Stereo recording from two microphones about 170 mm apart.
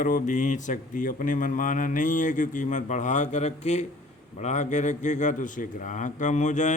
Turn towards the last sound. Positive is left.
turn(degrees=45)  # may be behind; listen again after turning